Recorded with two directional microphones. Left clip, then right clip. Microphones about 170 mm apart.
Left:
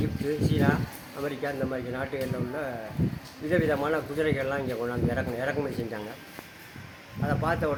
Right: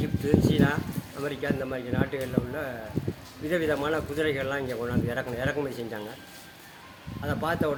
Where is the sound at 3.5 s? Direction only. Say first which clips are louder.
Left 1 dB; 5° right (ahead or behind).